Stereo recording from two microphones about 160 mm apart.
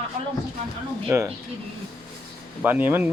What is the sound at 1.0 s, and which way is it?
Speech, 15° right (ahead or behind).